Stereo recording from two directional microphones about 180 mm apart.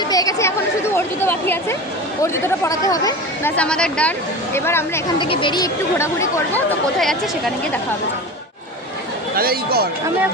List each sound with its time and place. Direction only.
0.1 s chatter: 20° left (ahead or behind)
0.9 s speech: 15° left (ahead or behind)
3.5 s speech: 5° left (ahead or behind)
5.2 s speech: 25° left (ahead or behind); by 7.8 s centre (ahead or behind)
9.3 s speech: 55° right (ahead or behind)